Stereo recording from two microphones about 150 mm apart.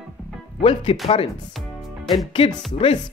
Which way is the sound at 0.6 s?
35° left (ahead or behind).